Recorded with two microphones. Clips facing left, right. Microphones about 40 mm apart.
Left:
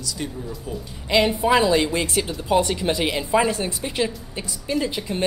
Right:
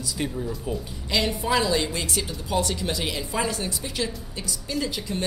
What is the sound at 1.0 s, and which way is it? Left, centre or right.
A woman's voice, left.